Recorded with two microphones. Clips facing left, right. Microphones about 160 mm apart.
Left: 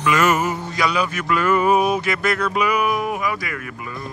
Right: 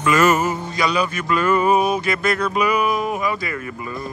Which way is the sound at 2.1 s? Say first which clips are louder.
Right 1 dB; 85° left.